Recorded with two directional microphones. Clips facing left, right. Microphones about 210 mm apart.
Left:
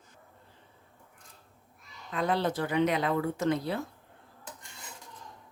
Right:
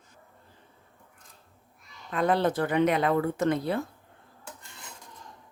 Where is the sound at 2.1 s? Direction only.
55° right (ahead or behind).